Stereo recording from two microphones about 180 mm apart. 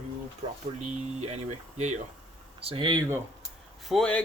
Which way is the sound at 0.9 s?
40° right (ahead or behind).